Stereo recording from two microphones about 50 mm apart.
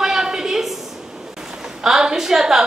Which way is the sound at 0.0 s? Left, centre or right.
Centre.